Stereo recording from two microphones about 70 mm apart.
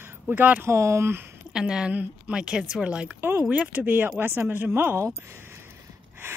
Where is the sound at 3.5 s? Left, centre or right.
Right.